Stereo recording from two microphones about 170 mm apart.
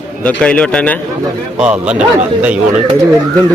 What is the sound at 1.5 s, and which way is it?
A man's voice, 5° right (ahead or behind).